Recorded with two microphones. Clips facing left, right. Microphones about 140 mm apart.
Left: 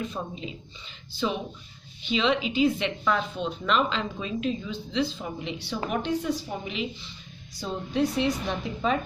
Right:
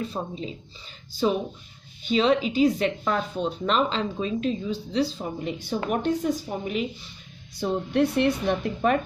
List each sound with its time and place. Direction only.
0.0 s speech: 35° right (ahead or behind)
7.5 s a woman's voice: 60° right (ahead or behind)